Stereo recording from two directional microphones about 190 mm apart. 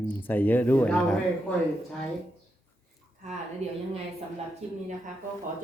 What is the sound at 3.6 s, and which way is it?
A woman's voice, 35° right (ahead or behind).